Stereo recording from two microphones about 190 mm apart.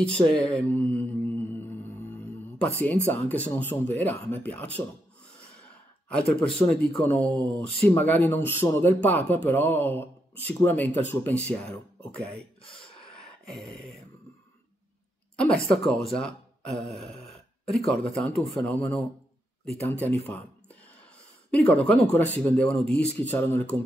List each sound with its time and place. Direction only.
0.0 s music: 5° left (ahead or behind)
2.8 s speech: 10° left (ahead or behind)
7.0 s speech: 5° left (ahead or behind)
13.1 s a sound: centre (ahead or behind)
15.3 s speech: 5° left (ahead or behind)
21.5 s speech: 5° left (ahead or behind)